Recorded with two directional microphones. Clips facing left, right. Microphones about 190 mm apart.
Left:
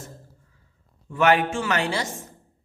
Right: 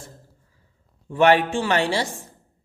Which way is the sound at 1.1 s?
35° right (ahead or behind).